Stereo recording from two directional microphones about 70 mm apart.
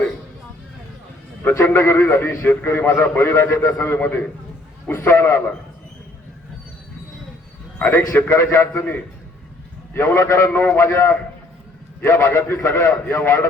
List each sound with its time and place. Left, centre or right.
1.5 s a man's voice: left
7.8 s a man's voice: left
10.5 s a man's voice: left
12.0 s a man's voice: left